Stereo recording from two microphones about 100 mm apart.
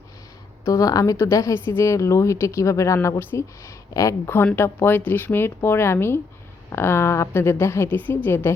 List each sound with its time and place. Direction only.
0.6 s a woman's voice: 35° left (ahead or behind)